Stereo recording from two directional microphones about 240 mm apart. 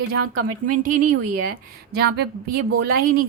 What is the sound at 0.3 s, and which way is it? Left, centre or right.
A woman's voice, right.